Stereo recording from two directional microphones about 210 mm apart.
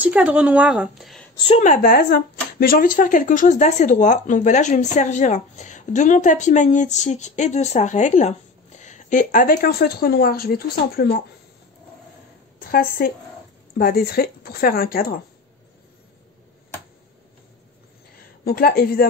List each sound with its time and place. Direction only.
0.0 s a woman's voice: 5° right (ahead or behind)
1.6 s speech: 40° left (ahead or behind)
12.5 s a woman's voice: 45° left (ahead or behind)
18.4 s speech: 45° left (ahead or behind)